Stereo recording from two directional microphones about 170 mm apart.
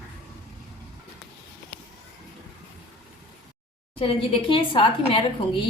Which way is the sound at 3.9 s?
30° left (ahead or behind).